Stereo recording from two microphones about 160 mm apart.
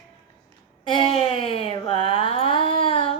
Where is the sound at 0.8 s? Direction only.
30° left (ahead or behind).